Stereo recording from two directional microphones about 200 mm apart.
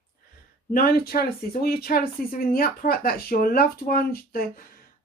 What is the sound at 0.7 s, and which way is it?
Speech, 45° left (ahead or behind).